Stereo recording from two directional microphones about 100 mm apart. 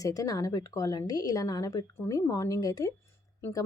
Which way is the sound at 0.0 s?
35° left (ahead or behind).